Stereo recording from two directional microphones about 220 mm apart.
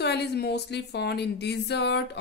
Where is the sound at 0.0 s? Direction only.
50° left (ahead or behind).